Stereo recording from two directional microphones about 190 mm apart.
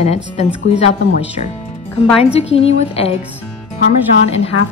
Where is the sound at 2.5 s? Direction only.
30° left (ahead or behind).